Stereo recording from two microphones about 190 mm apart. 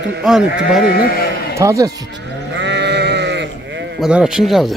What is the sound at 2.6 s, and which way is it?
Sheep, 65° right (ahead or behind).